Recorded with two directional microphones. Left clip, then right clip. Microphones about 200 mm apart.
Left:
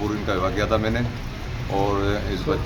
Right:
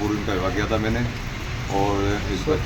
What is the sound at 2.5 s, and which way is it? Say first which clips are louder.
Speech: right 2 dB; 30° left (ahead or behind).